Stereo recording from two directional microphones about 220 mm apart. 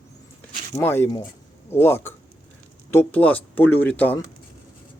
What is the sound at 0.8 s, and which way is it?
Speech, 10° left (ahead or behind).